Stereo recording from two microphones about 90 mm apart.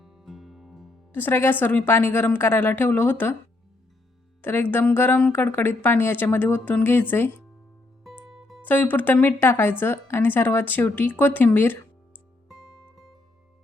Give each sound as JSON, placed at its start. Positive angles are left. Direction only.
{"t": 0.0, "sound": "music", "side_deg": -5}
{"t": 1.1, "sound": "a woman's voice", "side_deg": 25}
{"t": 4.4, "sound": "a woman's voice", "side_deg": 25}
{"t": 8.3, "sound": "music", "side_deg": -5}
{"t": 8.6, "sound": "a woman's voice", "side_deg": 20}
{"t": 12.5, "sound": "music", "side_deg": -5}